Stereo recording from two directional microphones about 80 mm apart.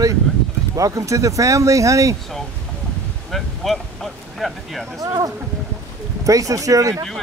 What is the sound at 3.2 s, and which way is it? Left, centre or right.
Speech, centre.